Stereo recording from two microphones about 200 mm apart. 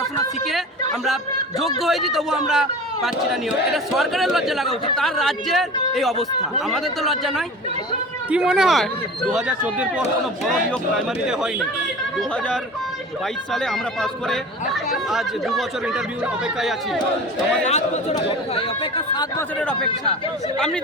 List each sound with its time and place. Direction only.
1.0 s speech: centre (ahead or behind)
13.5 s speech: 5° left (ahead or behind)
17.7 s speech: 35° left (ahead or behind)
19.5 s speech: 5° left (ahead or behind)